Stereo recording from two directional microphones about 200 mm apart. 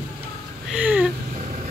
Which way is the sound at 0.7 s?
5° right (ahead or behind).